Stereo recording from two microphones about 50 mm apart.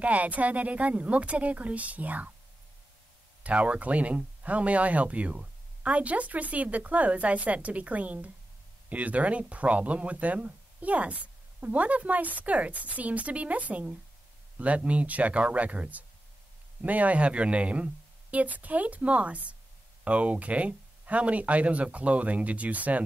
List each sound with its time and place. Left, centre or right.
0.0 s speech: right
3.4 s speech: right